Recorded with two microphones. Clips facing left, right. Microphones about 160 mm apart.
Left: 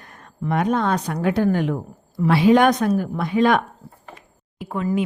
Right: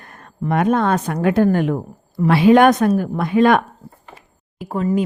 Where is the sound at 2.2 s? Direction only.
60° right (ahead or behind).